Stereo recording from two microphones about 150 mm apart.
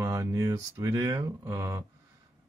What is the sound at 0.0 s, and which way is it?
A man's voice, 20° right (ahead or behind).